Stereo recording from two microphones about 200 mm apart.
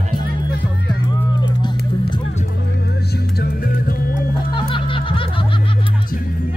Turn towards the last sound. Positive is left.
turn(degrees=25)  # may be behind; listen again after turning